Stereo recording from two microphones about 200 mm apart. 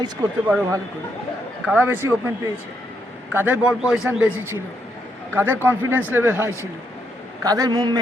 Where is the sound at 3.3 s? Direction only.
10° right (ahead or behind).